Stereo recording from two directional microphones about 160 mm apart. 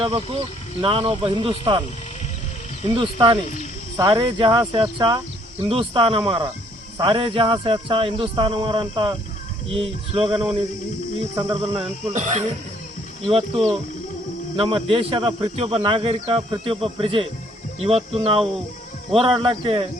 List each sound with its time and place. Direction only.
0.0 s speech: 35° right (ahead or behind)
2.9 s speech: 30° right (ahead or behind)
11.4 s speech: 35° right (ahead or behind)
12.1 s speech: 45° right (ahead or behind)
13.2 s speech: 35° right (ahead or behind)